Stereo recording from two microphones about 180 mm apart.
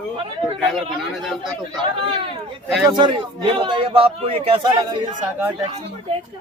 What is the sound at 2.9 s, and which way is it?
A man's voice, 25° right (ahead or behind).